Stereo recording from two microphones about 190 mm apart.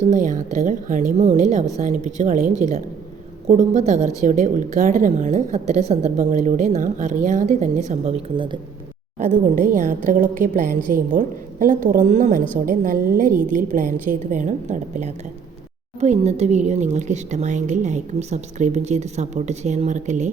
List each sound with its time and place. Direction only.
0.0 s a woman's voice: 45° right (ahead or behind)
7.9 s a woman's voice: 35° right (ahead or behind)
9.1 s a woman's voice: 40° right (ahead or behind)